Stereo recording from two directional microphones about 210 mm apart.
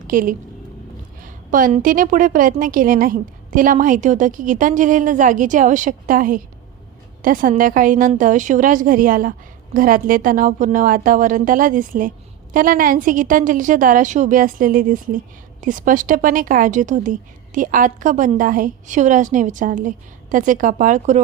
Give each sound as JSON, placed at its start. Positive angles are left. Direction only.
{"t": 0.1, "sound": "a woman's voice", "side_deg": -40}